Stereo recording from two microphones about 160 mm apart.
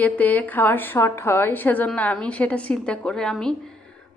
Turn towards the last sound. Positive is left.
turn(degrees=5)  # may be behind; listen again after turning